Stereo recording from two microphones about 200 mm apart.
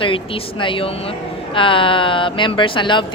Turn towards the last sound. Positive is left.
turn(degrees=25)  # may be behind; listen again after turning